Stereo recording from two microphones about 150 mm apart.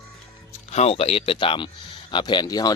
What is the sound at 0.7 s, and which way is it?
Speech, 45° left (ahead or behind).